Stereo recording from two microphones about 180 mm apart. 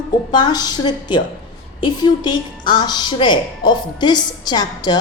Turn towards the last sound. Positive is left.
turn(degrees=25)  # may be behind; listen again after turning